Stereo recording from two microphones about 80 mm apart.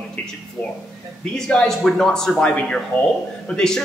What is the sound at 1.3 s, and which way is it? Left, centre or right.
Speech, centre.